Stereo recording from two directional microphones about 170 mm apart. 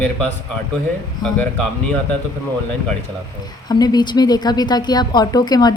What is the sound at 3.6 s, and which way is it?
A woman's voice, 25° left (ahead or behind).